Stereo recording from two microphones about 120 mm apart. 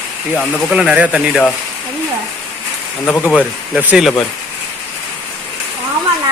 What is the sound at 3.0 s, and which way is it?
Speech, 15° left (ahead or behind).